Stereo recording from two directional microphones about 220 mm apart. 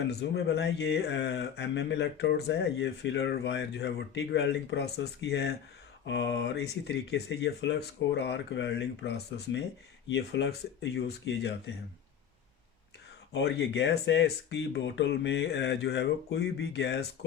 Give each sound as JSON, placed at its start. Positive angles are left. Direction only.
{"t": 0.1, "sound": "speech", "side_deg": 50}
{"t": 13.3, "sound": "speech", "side_deg": 50}